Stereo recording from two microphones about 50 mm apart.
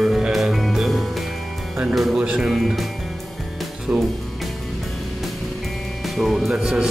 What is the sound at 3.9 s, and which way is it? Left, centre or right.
Speech, right.